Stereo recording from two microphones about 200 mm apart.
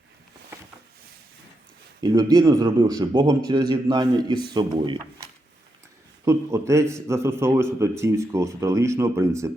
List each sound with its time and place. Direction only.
2.0 s a man's voice: 20° right (ahead or behind)
6.2 s a man's voice: 15° right (ahead or behind)